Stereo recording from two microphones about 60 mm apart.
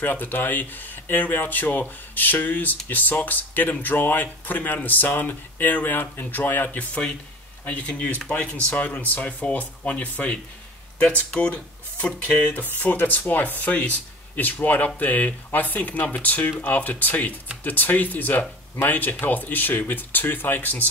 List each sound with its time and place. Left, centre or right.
0.0 s speech: left